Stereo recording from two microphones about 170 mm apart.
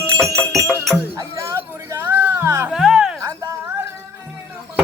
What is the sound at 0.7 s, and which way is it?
Music, centre (ahead or behind).